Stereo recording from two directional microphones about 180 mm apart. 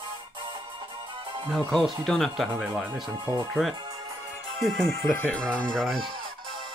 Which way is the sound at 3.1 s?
20° right (ahead or behind).